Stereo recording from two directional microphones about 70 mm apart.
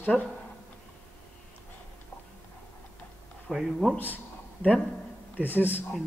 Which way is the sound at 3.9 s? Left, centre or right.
Left.